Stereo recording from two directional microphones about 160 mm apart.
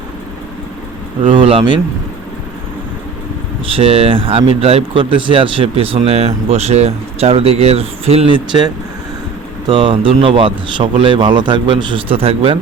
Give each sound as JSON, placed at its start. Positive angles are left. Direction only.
{"t": 1.3, "sound": "speech", "side_deg": -30}
{"t": 3.7, "sound": "speech", "side_deg": -35}